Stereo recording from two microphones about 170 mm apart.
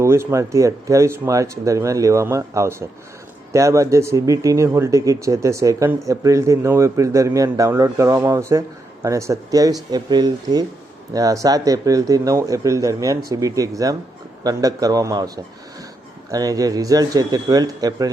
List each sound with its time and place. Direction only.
0.0 s a man's voice: 15° right (ahead or behind)
16.3 s a man's voice: 20° right (ahead or behind)